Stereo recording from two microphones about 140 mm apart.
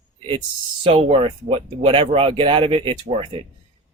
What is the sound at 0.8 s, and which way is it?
Speech, 40° right (ahead or behind).